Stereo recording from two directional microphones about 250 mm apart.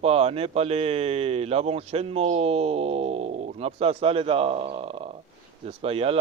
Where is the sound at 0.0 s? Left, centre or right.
Right.